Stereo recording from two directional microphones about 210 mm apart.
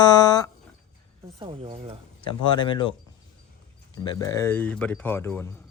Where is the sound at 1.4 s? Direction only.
25° right (ahead or behind).